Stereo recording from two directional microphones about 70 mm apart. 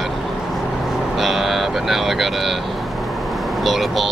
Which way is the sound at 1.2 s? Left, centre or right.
Centre.